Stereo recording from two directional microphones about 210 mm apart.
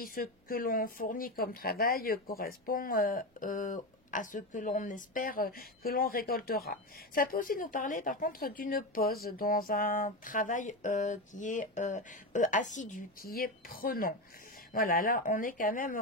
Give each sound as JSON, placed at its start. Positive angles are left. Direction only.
{"t": 0.0, "sound": "speech", "side_deg": 45}